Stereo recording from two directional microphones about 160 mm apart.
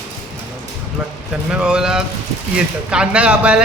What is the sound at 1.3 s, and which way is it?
A man's voice, 5° right (ahead or behind).